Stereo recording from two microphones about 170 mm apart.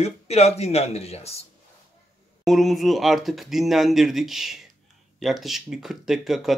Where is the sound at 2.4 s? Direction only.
Centre (ahead or behind).